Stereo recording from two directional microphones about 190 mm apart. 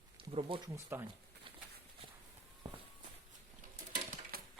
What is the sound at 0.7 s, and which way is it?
Speech, 15° right (ahead or behind).